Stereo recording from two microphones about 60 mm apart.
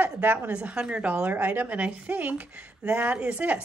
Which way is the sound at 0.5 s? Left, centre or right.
Right.